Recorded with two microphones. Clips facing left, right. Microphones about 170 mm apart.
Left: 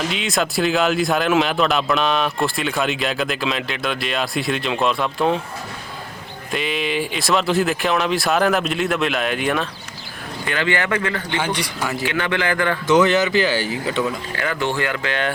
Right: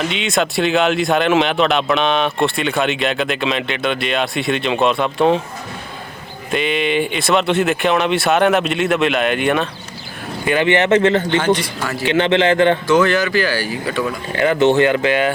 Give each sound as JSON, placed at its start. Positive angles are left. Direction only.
{"t": 0.1, "sound": "speech", "side_deg": 0}
{"t": 6.5, "sound": "speech", "side_deg": 0}
{"t": 10.4, "sound": "speech", "side_deg": -20}
{"t": 11.3, "sound": "a man's voice", "side_deg": 10}
{"t": 12.0, "sound": "speech", "side_deg": -25}
{"t": 12.9, "sound": "speech", "side_deg": 20}
{"t": 14.3, "sound": "speech", "side_deg": -20}